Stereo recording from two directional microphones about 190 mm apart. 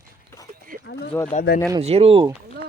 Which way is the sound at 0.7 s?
45° right (ahead or behind).